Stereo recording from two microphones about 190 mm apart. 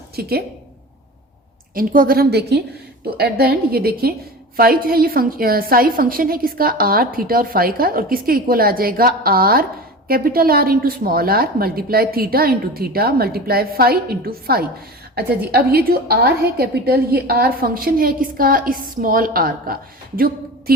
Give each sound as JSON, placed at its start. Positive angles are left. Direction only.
{"t": 0.2, "sound": "a woman's voice", "side_deg": -55}
{"t": 1.7, "sound": "a woman's voice", "side_deg": -50}